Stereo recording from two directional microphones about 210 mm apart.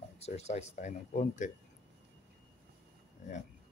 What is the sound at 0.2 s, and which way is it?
Speech, 30° left (ahead or behind).